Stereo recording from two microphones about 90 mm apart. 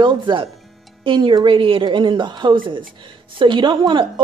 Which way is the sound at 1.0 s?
70° right (ahead or behind).